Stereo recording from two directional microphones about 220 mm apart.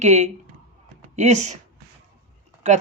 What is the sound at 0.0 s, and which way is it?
Speech, 30° right (ahead or behind).